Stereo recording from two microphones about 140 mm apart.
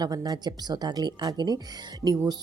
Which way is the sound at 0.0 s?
30° right (ahead or behind).